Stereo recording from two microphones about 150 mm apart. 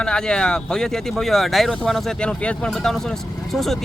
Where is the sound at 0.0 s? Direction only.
5° left (ahead or behind).